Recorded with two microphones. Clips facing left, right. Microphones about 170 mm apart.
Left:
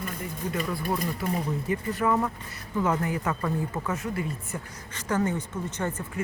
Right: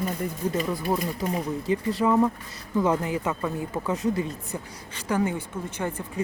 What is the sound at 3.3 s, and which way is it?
Speech, 10° right (ahead or behind).